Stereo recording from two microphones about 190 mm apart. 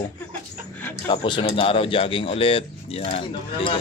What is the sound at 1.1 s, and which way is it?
Speech, 25° left (ahead or behind).